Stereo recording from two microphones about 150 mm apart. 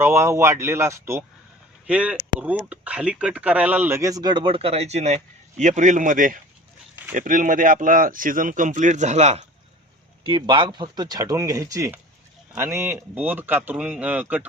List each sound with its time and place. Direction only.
0.0 s speech: 15° right (ahead or behind); by 9.4 s 50° right (ahead or behind)
10.2 s speech: 35° right (ahead or behind); by 14.4 s 10° right (ahead or behind)